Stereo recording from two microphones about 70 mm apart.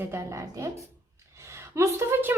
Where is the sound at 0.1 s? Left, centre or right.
Right.